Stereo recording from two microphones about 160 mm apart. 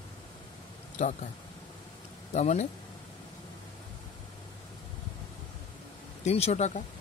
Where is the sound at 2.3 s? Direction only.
45° left (ahead or behind).